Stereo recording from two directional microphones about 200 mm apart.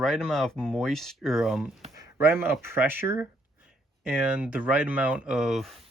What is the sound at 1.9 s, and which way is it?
Speech, 15° right (ahead or behind).